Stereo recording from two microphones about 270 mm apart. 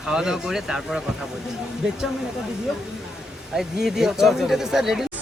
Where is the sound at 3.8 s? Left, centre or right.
Centre.